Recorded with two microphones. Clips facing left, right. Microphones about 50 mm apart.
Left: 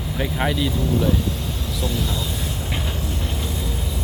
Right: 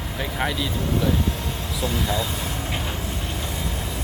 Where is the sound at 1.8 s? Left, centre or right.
Right.